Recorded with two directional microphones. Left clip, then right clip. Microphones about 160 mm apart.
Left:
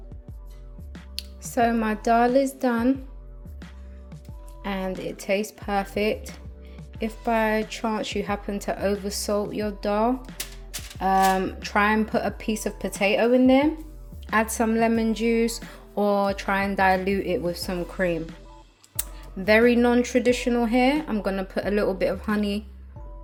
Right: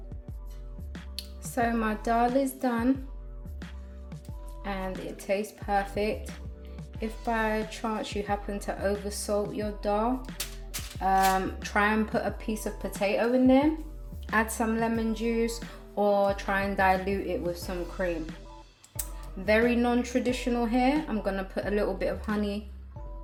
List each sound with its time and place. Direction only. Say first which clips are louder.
1.1 s a woman's voice: left 6 dB; 40° left (ahead or behind)
4.6 s speech: left 5 dB; 40° left (ahead or behind)
19.5 s speech: left 6 dB; 45° left (ahead or behind)